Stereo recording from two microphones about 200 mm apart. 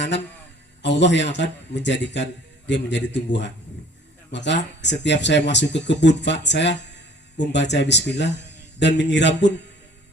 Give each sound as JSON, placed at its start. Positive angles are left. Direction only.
{"t": 0.8, "sound": "a man's voice", "side_deg": 60}